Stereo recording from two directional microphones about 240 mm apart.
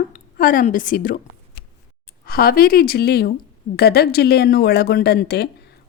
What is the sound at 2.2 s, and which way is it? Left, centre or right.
Speech, left.